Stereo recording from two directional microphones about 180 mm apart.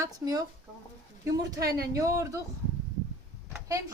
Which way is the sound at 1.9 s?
15° right (ahead or behind).